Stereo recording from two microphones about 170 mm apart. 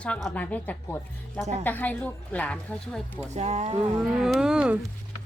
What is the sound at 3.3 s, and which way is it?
Speech, 40° right (ahead or behind).